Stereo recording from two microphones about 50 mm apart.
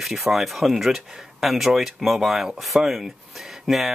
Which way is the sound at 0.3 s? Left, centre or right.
Centre.